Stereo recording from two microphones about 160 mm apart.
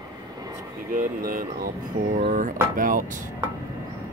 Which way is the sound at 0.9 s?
60° right (ahead or behind).